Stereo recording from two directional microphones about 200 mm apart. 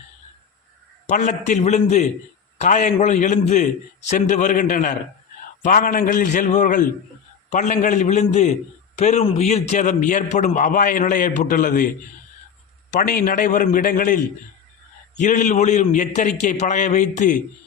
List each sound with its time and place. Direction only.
1.0 s a man's voice: 40° left (ahead or behind)
12.9 s a man's voice: 45° left (ahead or behind)